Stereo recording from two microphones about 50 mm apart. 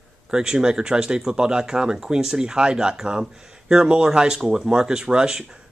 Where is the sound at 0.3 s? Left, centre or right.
Centre.